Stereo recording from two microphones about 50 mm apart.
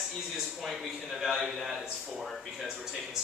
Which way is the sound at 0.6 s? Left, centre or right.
Centre.